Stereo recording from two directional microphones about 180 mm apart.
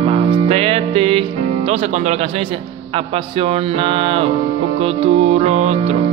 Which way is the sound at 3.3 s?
30° right (ahead or behind).